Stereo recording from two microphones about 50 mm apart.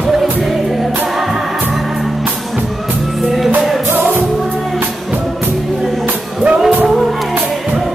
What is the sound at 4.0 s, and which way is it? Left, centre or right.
Music, right.